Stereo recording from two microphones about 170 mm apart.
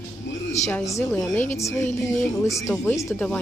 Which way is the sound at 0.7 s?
20° left (ahead or behind).